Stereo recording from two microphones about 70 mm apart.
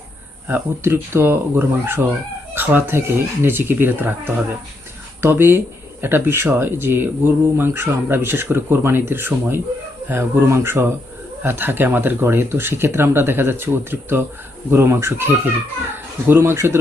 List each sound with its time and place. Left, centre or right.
0.4 s speech: right
5.2 s speech: right